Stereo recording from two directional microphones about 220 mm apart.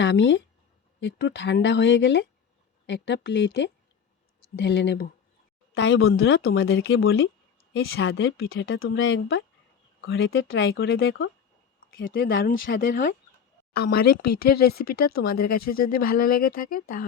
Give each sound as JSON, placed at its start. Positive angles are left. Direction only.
{"t": 0.0, "sound": "speech", "side_deg": 60}
{"t": 11.9, "sound": "speech", "side_deg": 40}